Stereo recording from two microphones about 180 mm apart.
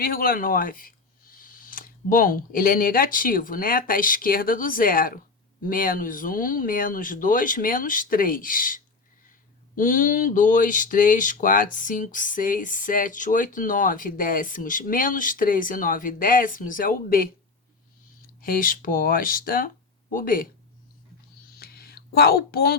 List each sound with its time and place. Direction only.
0.0 s speech: 55° left (ahead or behind)
18.4 s speech: 50° left (ahead or behind)
21.6 s whispering: 60° left (ahead or behind)